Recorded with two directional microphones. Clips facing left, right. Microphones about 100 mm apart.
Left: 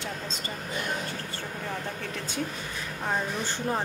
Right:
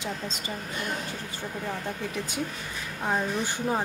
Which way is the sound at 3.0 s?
10° right (ahead or behind).